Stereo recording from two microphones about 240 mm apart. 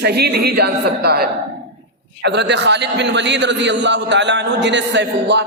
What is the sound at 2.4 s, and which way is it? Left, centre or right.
A man's voice, right.